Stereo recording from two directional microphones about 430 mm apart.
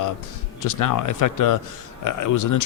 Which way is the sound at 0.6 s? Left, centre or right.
Left.